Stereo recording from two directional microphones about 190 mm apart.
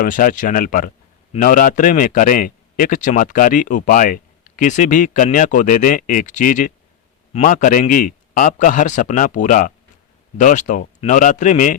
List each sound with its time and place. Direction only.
0.0 s a man's voice: 45° left (ahead or behind)